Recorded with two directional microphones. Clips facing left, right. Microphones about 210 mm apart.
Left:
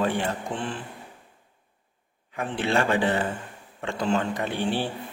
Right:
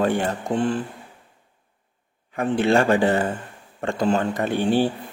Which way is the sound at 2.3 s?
45° right (ahead or behind).